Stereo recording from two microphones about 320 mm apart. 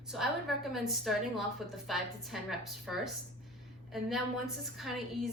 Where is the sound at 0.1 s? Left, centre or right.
Centre.